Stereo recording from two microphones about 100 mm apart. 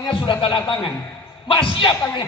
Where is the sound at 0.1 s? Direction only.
55° left (ahead or behind).